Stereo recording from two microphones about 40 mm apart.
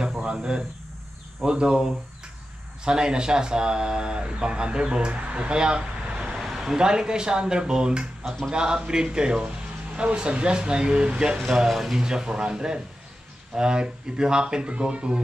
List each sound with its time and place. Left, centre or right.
0.3 s speech: centre
6.4 s speech: centre
11.4 s speech: centre; by 15.1 s right